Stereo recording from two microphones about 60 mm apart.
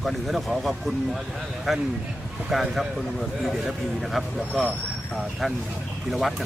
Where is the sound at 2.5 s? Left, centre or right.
Centre.